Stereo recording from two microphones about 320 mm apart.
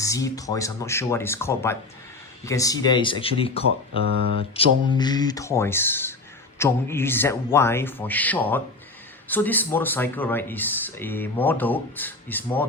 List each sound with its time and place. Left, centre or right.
0.0 s speech: centre
4.0 s speech: right
4.5 s speech: centre